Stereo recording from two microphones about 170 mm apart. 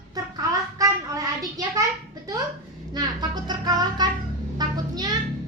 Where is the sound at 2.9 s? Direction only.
25° right (ahead or behind).